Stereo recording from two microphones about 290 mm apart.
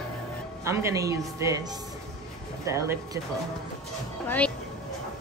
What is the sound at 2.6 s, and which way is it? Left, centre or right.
Speech, centre.